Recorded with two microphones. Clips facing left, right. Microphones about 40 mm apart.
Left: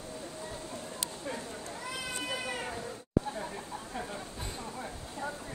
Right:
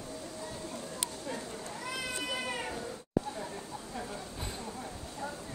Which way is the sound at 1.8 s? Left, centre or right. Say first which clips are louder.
Right 2 dB; centre.